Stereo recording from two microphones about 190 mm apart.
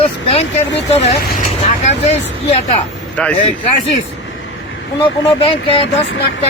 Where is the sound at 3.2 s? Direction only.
5° left (ahead or behind).